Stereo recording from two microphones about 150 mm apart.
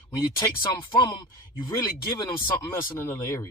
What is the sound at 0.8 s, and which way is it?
Speech, 30° left (ahead or behind).